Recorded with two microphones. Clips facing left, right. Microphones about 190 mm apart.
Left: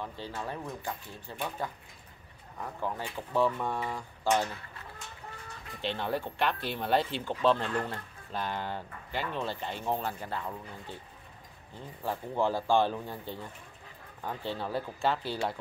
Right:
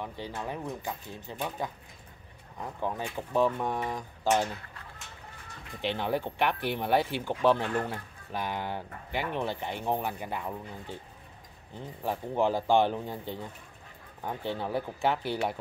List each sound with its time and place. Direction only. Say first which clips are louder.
0.0 s speech: right 1 dB; 15° right (ahead or behind)
5.8 s speech: right 3 dB; 15° right (ahead or behind)